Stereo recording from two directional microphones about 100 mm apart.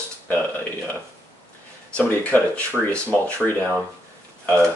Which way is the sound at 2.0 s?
20° left (ahead or behind).